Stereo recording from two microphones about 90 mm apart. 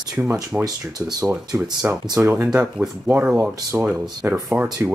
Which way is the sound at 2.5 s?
10° right (ahead or behind).